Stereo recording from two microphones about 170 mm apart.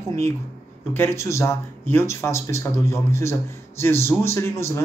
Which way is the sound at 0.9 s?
15° left (ahead or behind).